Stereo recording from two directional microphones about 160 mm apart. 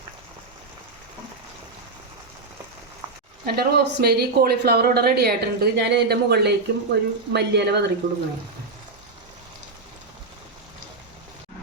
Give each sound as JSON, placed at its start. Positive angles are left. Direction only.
{"t": 3.4, "sound": "speech", "side_deg": -75}